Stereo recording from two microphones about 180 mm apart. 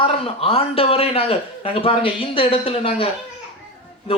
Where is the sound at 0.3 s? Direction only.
30° left (ahead or behind).